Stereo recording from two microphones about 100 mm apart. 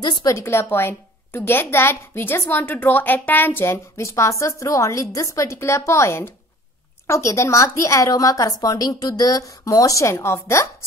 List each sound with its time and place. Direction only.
0.3 s a woman's voice: 25° left (ahead or behind)